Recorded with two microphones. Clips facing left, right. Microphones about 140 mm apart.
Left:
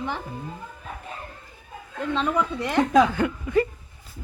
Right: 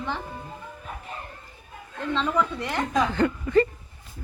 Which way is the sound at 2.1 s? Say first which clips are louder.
Even; 15° left (ahead or behind).